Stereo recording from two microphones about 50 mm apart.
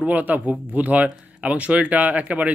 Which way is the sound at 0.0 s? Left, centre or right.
Right.